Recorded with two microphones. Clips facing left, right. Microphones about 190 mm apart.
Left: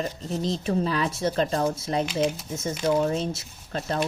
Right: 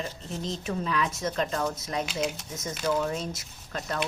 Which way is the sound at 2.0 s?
Centre (ahead or behind).